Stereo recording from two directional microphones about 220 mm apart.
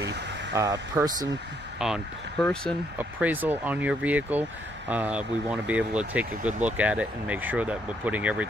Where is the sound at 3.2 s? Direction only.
10° right (ahead or behind).